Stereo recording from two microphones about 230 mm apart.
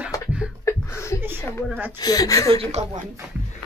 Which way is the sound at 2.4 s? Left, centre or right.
Right.